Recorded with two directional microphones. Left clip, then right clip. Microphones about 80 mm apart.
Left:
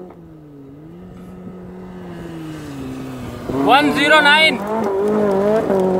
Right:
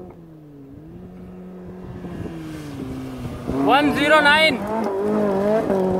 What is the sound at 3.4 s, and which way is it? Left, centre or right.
Vehicle, left.